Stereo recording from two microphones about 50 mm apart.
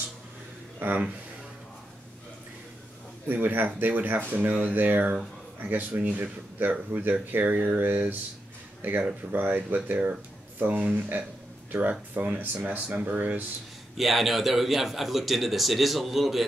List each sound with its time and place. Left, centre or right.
0.7 s speech: right
3.3 s speech: right
13.9 s a man's voice: centre